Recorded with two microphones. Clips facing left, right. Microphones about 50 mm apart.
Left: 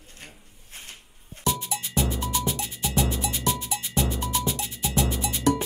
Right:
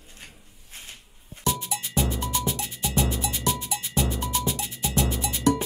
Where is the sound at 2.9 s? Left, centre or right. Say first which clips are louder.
Even; centre.